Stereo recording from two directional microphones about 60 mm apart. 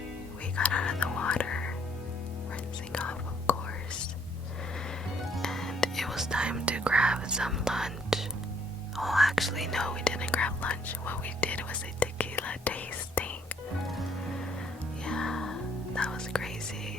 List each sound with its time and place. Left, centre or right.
0.5 s whispering: centre
2.9 s whispering: centre
5.4 s whispering: centre
6.2 s whispering: centre; by 13.6 s left
15.0 s whispering: centre